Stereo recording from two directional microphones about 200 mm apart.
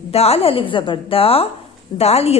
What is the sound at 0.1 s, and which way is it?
A woman's voice, 30° left (ahead or behind).